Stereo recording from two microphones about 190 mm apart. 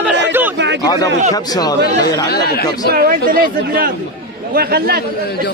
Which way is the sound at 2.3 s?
55° left (ahead or behind).